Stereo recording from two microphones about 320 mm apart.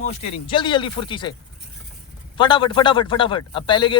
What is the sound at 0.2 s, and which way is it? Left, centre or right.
A man's voice, centre.